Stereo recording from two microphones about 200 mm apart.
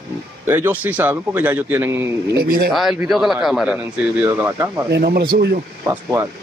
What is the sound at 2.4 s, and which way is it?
Speech, 50° right (ahead or behind).